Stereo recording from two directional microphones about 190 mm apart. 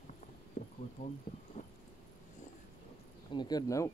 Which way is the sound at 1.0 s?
35° left (ahead or behind).